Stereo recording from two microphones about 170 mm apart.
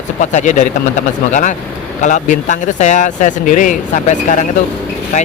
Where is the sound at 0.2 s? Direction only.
45° left (ahead or behind).